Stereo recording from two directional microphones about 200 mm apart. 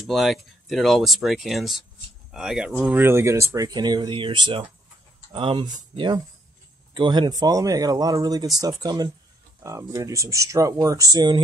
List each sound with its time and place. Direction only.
0.1 s speech: centre (ahead or behind); by 11.4 s 20° right (ahead or behind)